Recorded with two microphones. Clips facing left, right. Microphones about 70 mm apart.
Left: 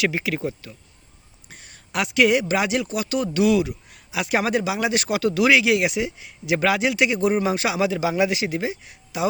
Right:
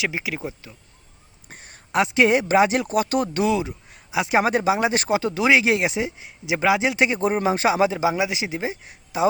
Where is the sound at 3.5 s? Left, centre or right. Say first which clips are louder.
Left 3 dB; right.